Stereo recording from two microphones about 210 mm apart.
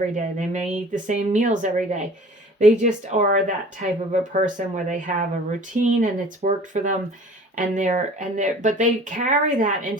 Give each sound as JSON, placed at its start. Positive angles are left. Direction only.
{"t": 0.1, "sound": "speech", "side_deg": -35}